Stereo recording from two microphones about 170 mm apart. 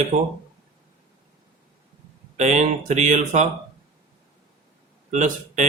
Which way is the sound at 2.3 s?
45° right (ahead or behind).